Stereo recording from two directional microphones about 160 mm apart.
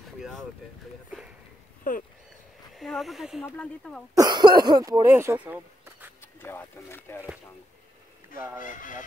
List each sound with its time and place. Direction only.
0.2 s speech: centre (ahead or behind)
1.9 s speech: 55° left (ahead or behind)
2.7 s speech: centre (ahead or behind)
4.1 s cough: 25° right (ahead or behind)
4.6 s speech: 25° right (ahead or behind)
6.4 s speech: 15° left (ahead or behind)
8.5 s speech: 55° left (ahead or behind)